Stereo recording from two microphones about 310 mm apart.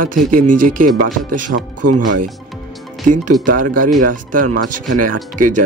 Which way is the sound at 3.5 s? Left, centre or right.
Right.